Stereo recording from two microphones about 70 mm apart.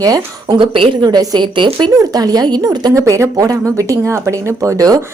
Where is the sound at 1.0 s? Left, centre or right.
Right.